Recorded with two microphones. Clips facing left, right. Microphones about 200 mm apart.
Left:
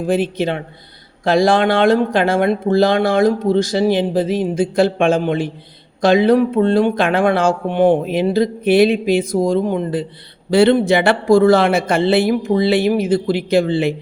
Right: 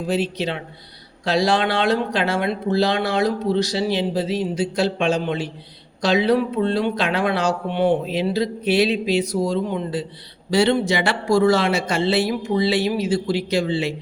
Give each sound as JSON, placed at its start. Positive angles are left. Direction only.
{"t": 0.0, "sound": "speech", "side_deg": 50}